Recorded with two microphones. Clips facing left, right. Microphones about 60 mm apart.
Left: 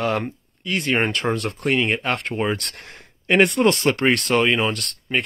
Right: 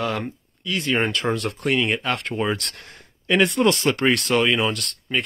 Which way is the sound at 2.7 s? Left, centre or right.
Left.